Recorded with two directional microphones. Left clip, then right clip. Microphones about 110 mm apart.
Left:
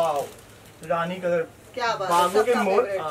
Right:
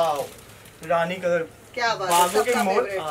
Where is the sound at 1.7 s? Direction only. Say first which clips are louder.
Right 1 dB; 5° left (ahead or behind).